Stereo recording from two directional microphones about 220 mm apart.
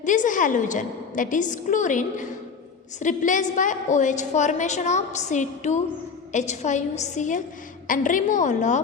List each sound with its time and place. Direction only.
0.0 s a woman's voice: 35° left (ahead or behind)